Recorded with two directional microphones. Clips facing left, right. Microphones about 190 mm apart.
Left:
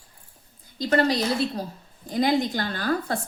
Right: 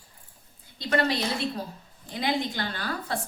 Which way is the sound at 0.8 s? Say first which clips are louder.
Left 4 dB; 40° left (ahead or behind).